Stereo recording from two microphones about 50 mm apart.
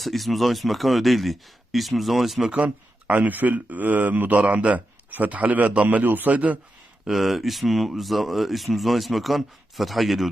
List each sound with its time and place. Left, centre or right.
0.0 s speech: centre
2.6 s a man's voice: right
7.1 s speech: centre